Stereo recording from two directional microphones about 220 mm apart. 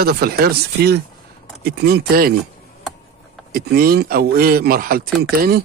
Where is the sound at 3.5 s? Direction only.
40° right (ahead or behind).